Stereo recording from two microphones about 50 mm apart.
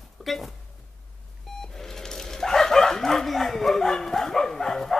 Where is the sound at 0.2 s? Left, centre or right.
Centre.